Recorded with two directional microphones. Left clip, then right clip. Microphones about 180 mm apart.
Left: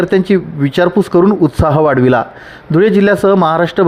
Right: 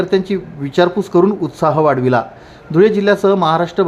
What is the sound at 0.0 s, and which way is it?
Speech, 30° left (ahead or behind).